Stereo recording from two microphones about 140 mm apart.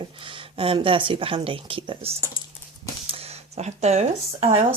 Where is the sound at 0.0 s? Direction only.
40° right (ahead or behind).